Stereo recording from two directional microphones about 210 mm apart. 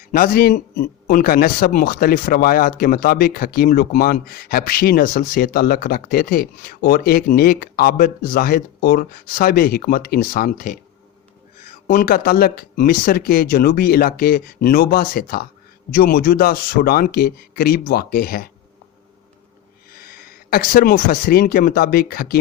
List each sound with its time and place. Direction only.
0.1 s speech: 45° left (ahead or behind)
19.9 s speech: 45° left (ahead or behind)